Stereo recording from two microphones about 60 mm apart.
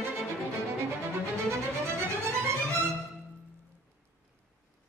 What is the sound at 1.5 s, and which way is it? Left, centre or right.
Music, right.